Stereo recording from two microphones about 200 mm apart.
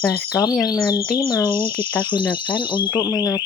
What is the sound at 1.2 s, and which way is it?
Speech, 10° right (ahead or behind).